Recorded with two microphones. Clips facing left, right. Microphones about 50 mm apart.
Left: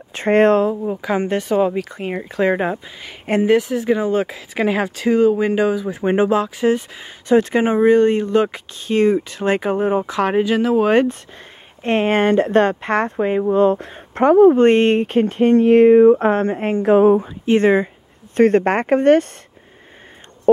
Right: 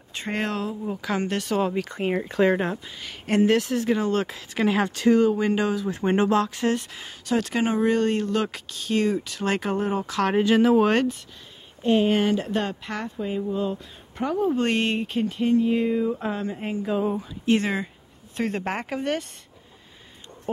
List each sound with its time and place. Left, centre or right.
0.1 s speech: left
0.8 s speech: centre
1.8 s speech: centre
2.5 s speech: centre
7.2 s speech: left
10.4 s speech: centre
11.8 s speech: left
14.5 s speech: left
17.6 s speech: left
18.3 s speech: left